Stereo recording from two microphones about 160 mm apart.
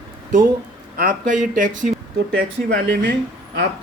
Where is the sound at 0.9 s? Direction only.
55° right (ahead or behind).